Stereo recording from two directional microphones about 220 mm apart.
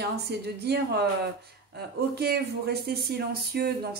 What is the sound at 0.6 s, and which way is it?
Speech, 50° right (ahead or behind).